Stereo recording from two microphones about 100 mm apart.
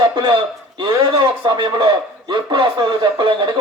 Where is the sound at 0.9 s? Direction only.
40° right (ahead or behind).